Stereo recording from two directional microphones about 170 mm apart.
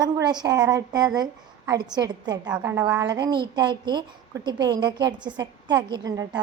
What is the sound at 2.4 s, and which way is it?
A woman's voice, 15° right (ahead or behind).